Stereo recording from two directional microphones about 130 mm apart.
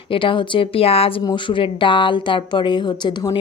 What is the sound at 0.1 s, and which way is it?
Speech, 40° left (ahead or behind).